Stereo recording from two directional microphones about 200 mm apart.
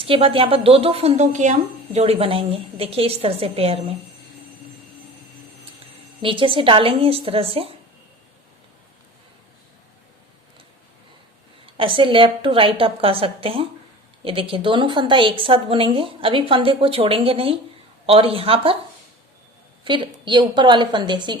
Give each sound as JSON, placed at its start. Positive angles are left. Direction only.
{"t": 0.0, "sound": "speech", "side_deg": -25}
{"t": 6.2, "sound": "speech", "side_deg": -25}
{"t": 11.6, "sound": "speech", "side_deg": -25}
{"t": 19.8, "sound": "speech", "side_deg": -25}